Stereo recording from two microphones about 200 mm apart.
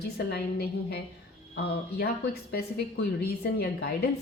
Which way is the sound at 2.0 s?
50° left (ahead or behind).